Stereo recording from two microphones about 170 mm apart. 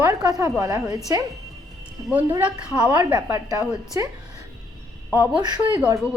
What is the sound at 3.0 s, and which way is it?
A woman's voice, 25° right (ahead or behind).